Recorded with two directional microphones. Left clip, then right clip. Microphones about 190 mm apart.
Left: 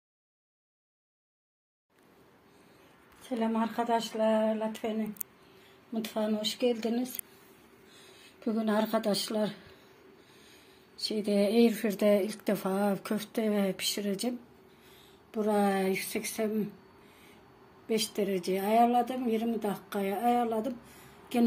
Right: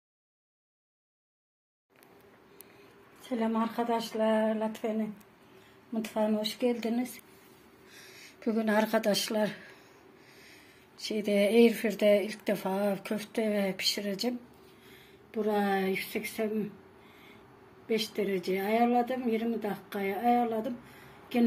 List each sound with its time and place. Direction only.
3.3 s speech: centre (ahead or behind); by 7.1 s 15° left (ahead or behind)
8.5 s speech: centre (ahead or behind)
11.1 s speech: 10° left (ahead or behind)
15.3 s a woman's voice: 25° left (ahead or behind)
17.8 s a woman's voice: 20° left (ahead or behind)